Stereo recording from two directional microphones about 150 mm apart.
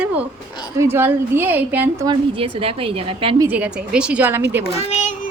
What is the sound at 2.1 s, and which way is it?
A woman's voice, 35° right (ahead or behind).